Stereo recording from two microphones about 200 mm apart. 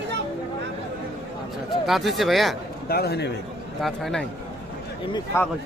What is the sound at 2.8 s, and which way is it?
Speech, 50° left (ahead or behind).